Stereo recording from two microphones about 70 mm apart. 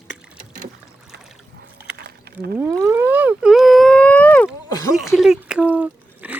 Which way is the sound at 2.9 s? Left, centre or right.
Right.